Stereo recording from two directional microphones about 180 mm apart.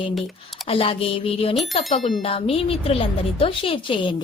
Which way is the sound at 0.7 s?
30° left (ahead or behind).